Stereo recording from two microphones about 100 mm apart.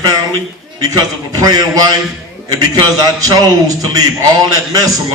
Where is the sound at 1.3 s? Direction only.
40° right (ahead or behind).